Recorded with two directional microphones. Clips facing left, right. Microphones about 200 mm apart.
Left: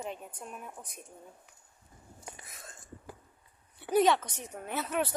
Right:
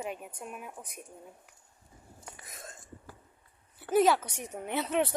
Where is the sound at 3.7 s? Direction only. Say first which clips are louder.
Right 1 dB; centre (ahead or behind); by 5.2 s 20° right (ahead or behind).